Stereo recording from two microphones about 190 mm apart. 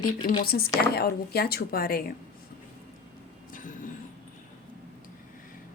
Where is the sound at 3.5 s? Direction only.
45° left (ahead or behind).